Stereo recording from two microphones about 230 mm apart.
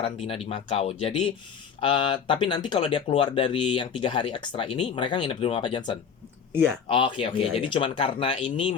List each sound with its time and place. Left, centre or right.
0.0 s speech: left